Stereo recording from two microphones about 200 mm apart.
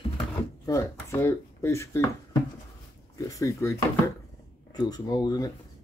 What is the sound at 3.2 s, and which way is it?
Speech, 15° left (ahead or behind).